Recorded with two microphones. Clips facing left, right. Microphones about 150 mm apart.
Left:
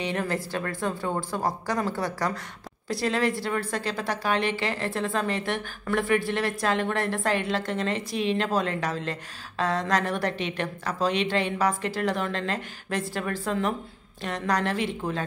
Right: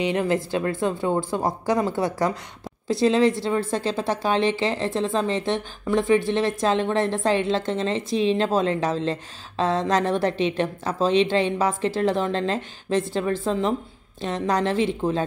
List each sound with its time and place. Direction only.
0.1 s a woman's voice: 20° right (ahead or behind)